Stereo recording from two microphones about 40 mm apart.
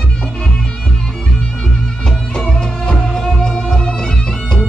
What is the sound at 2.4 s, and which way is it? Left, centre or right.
Music, centre.